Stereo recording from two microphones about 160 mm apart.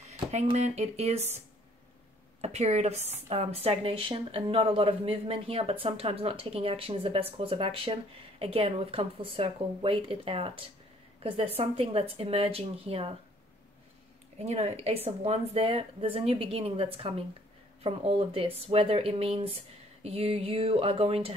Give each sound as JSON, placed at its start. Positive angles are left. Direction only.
{"t": 0.3, "sound": "speech", "side_deg": -45}
{"t": 2.4, "sound": "speech", "side_deg": -45}
{"t": 14.4, "sound": "speech", "side_deg": -40}